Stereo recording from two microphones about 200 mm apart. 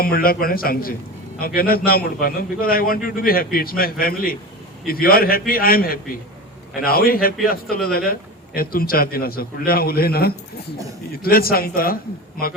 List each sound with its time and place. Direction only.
0.0 s a man's voice: 45° left (ahead or behind)